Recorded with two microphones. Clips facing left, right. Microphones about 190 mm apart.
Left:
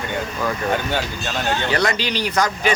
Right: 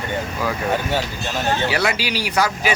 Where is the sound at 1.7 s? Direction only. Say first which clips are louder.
Left 1 dB; 10° right (ahead or behind).